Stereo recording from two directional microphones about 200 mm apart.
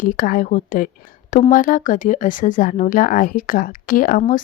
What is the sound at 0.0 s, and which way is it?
A woman's voice, 45° left (ahead or behind).